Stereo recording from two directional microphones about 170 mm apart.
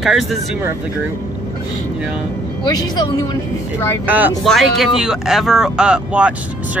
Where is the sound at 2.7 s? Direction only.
25° left (ahead or behind).